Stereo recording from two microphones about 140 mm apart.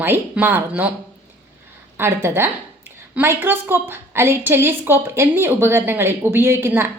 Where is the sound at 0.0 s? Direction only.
15° right (ahead or behind).